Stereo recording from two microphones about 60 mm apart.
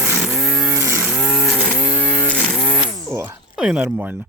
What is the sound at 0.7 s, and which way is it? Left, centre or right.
Vehicle, right.